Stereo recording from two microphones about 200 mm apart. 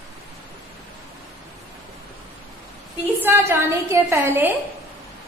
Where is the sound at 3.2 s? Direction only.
15° right (ahead or behind).